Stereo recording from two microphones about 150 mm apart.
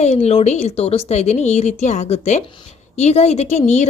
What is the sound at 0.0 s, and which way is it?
Speech, 45° left (ahead or behind).